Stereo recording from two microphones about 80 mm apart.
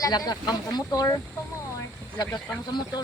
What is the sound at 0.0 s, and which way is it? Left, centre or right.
Speech, left.